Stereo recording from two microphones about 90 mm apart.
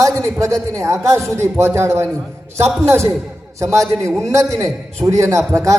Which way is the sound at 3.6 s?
35° right (ahead or behind).